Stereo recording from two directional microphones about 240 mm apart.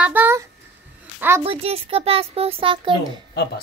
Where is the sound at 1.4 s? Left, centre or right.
Right.